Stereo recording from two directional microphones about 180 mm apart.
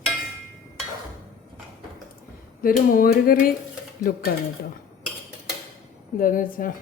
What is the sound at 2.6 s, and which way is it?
Music, 50° left (ahead or behind).